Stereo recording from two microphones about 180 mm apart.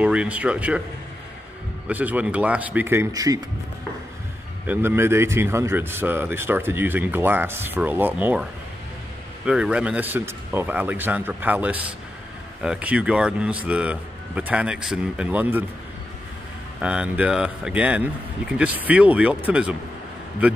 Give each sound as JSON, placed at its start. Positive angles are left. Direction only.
{"t": 0.0, "sound": "speech", "side_deg": -5}
{"t": 1.9, "sound": "speech", "side_deg": -10}
{"t": 4.6, "sound": "speech", "side_deg": -15}
{"t": 9.5, "sound": "speech", "side_deg": -5}
{"t": 16.8, "sound": "speech", "side_deg": -5}